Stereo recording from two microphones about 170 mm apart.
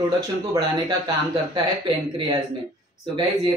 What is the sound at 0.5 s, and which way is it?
Speech, 25° right (ahead or behind).